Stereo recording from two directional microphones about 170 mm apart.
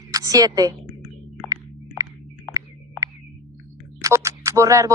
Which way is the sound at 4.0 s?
20° right (ahead or behind).